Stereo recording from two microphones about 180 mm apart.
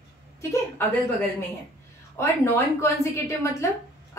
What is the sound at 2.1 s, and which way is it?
A woman's voice, 15° left (ahead or behind).